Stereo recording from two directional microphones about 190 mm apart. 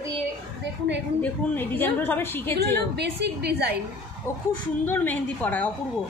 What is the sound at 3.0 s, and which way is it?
Speech, 60° right (ahead or behind).